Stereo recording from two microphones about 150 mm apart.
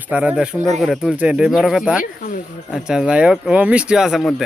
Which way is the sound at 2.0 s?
70° left (ahead or behind).